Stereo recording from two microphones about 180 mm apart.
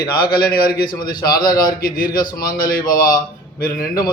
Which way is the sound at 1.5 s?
20° left (ahead or behind).